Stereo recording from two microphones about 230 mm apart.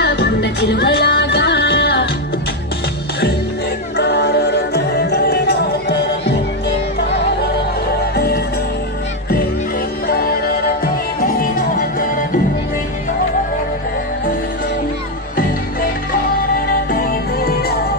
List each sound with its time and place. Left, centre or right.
0.0 s music: left
3.9 s music: left
10.0 s music: left
17.0 s music: left